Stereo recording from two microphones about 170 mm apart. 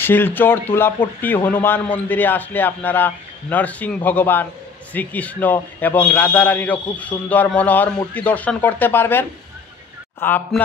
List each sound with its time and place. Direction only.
0.0 s a man's voice: 10° left (ahead or behind)
10.2 s a man's voice: 10° left (ahead or behind)